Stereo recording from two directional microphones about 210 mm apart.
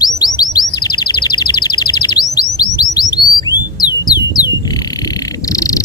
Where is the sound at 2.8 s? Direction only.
20° left (ahead or behind).